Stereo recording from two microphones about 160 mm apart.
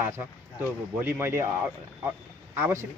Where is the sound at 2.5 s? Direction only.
15° right (ahead or behind).